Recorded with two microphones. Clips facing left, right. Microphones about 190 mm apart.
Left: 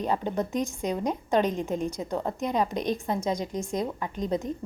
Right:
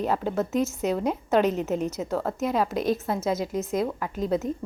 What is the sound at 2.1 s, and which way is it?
Speech, 15° left (ahead or behind).